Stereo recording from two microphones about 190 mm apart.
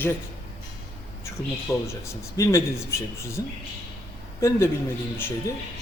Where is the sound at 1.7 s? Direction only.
15° left (ahead or behind).